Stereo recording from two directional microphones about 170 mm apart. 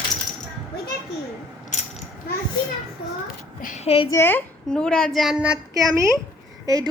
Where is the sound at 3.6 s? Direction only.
40° left (ahead or behind).